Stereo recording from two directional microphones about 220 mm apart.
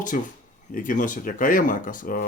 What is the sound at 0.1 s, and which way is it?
Speech, 40° left (ahead or behind).